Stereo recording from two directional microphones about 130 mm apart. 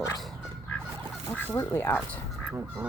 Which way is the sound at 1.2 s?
15° left (ahead or behind).